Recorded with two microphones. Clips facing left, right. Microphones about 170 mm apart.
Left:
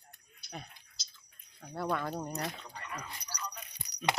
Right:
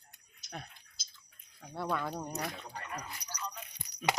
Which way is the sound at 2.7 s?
45° right (ahead or behind).